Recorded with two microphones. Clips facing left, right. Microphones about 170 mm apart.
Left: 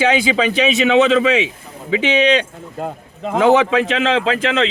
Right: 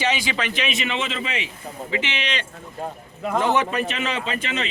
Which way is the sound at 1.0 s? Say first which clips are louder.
Left 14 dB; 80° left.